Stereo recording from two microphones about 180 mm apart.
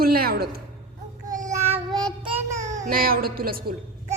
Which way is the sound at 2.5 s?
40° right (ahead or behind).